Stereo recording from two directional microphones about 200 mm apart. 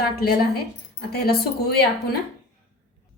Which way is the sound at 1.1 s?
55° left (ahead or behind).